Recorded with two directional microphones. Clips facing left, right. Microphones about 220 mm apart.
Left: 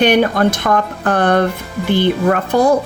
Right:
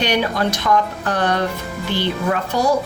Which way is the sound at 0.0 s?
55° left (ahead or behind).